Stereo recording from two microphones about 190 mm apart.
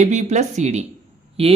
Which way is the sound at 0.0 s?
35° right (ahead or behind).